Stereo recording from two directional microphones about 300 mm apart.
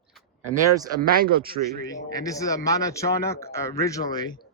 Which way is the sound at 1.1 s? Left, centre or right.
Right.